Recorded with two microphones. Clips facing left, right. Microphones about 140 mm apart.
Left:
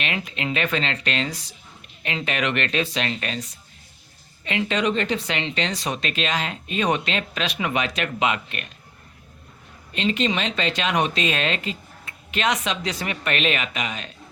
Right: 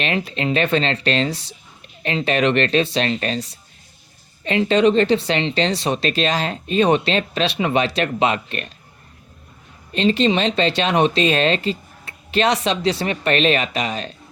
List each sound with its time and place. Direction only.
0.0 s speech: 35° right (ahead or behind)
9.9 s speech: 35° right (ahead or behind)